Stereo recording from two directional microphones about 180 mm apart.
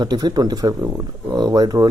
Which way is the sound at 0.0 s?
25° right (ahead or behind).